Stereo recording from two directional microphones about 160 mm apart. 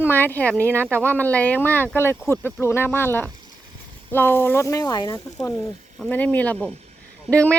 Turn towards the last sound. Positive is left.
turn(degrees=10)  # may be behind; listen again after turning